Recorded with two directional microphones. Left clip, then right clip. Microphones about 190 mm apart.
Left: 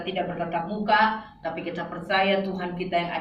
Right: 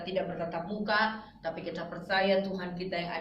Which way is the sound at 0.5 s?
15° right (ahead or behind).